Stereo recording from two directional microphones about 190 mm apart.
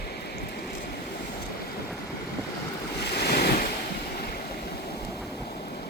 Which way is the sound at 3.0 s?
60° left (ahead or behind).